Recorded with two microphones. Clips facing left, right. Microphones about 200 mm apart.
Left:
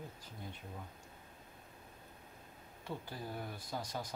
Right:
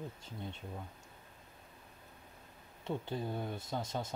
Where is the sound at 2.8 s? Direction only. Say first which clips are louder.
Right 6 dB; 25° right (ahead or behind).